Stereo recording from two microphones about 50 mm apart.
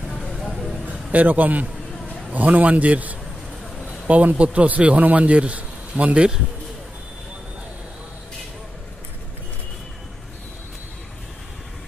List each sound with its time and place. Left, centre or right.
0.2 s vehicle: centre
0.8 s a man's voice: right